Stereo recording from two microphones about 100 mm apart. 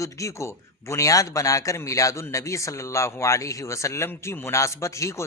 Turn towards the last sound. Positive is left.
turn(degrees=30)  # may be behind; listen again after turning